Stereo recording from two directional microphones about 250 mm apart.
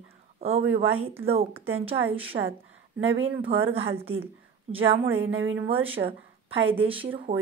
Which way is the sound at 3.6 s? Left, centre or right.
Right.